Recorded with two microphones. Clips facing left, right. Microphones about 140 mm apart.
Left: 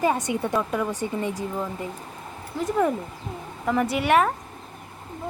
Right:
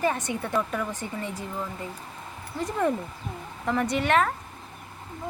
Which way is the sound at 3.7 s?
5° left (ahead or behind).